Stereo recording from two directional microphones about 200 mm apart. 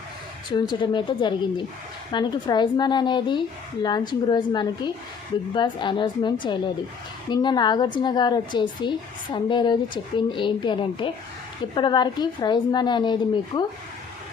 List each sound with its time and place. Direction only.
0.5 s a woman's voice: 20° left (ahead or behind)